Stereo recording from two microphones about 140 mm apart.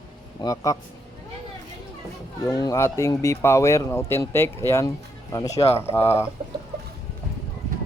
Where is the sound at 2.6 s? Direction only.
25° left (ahead or behind).